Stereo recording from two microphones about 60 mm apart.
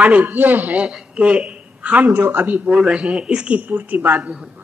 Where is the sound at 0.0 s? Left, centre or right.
Right.